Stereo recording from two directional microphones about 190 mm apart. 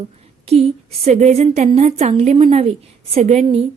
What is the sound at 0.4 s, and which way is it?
A woman's voice, 30° right (ahead or behind).